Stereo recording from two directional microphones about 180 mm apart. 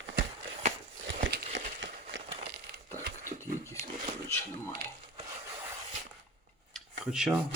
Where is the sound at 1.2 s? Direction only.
75° right (ahead or behind).